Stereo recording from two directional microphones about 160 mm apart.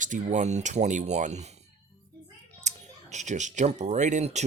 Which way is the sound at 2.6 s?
45° right (ahead or behind).